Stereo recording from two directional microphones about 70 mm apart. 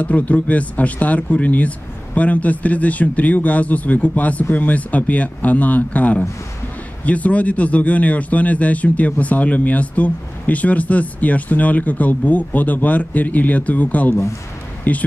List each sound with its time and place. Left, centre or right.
0.0 s speech: left